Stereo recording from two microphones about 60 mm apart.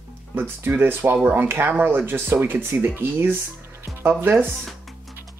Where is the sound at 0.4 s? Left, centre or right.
Right.